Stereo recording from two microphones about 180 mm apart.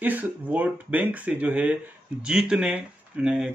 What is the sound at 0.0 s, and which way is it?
Speech, 10° right (ahead or behind).